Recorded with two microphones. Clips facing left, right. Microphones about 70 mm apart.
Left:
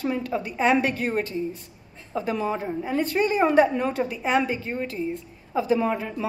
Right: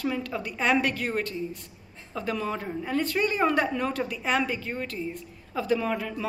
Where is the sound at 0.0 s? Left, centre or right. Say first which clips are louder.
Left 3 dB; left.